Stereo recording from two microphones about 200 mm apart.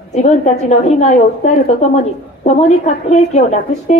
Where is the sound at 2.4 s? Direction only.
35° left (ahead or behind).